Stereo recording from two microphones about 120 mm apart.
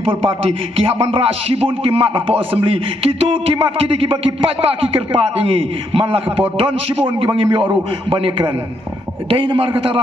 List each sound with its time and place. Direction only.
0.7 s speech: 50° right (ahead or behind)